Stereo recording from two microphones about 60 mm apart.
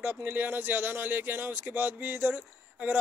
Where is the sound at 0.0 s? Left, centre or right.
Right.